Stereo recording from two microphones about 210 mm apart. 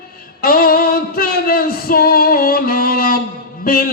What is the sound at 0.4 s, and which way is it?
Music, 45° left (ahead or behind).